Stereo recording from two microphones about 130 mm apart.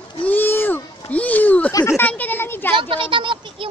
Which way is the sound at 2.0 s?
15° left (ahead or behind).